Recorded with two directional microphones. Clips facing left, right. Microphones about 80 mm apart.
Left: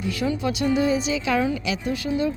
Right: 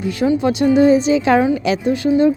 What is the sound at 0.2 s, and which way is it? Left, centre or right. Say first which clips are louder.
A woman's voice: right 10 dB; right.